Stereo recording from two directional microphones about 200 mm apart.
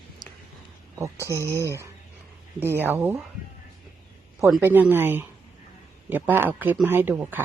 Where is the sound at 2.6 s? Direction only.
10° right (ahead or behind).